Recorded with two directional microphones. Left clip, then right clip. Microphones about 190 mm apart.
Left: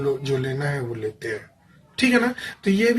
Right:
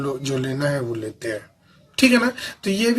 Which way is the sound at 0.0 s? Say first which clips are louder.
Left 1 dB; 40° right (ahead or behind).